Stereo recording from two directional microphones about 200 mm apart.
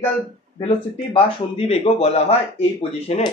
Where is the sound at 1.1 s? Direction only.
30° left (ahead or behind).